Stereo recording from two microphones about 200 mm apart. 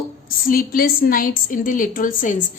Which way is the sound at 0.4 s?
45° left (ahead or behind).